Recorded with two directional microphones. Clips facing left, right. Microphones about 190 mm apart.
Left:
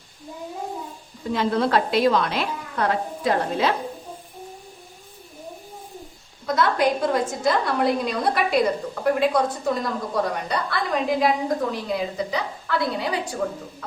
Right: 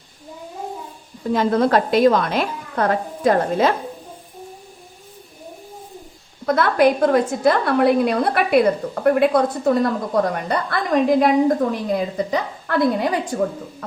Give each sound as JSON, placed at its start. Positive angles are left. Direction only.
{"t": 1.3, "sound": "a woman's voice", "side_deg": -45}
{"t": 6.4, "sound": "a woman's voice", "side_deg": -55}